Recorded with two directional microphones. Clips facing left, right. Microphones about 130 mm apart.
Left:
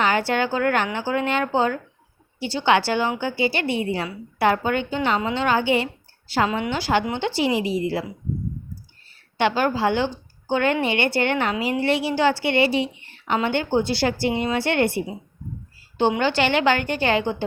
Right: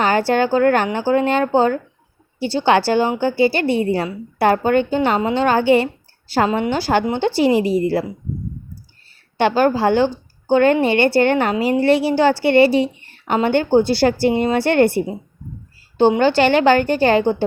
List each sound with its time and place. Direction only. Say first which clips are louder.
0.0 s a woman's voice: right 5 dB; 35° right (ahead or behind)
9.4 s a woman's voice: right 5 dB; 40° right (ahead or behind)